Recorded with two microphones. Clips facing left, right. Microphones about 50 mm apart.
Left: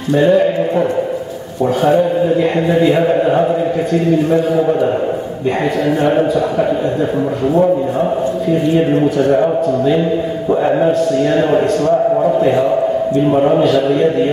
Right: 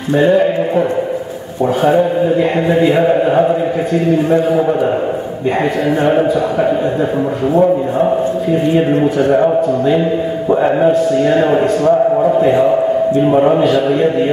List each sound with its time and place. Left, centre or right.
0.1 s a man's voice: centre
6.0 s a man's voice: centre